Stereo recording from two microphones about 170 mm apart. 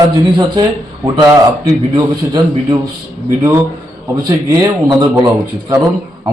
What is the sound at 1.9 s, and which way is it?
Speech, 25° right (ahead or behind).